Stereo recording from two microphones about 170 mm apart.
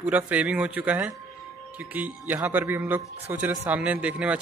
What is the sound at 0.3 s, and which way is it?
Speech, 10° right (ahead or behind).